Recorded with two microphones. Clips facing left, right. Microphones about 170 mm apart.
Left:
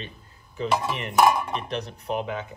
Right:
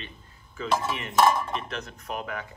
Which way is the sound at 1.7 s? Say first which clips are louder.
Left 6 dB; 35° left (ahead or behind).